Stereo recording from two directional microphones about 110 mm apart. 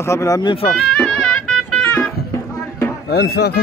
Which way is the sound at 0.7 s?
5° left (ahead or behind).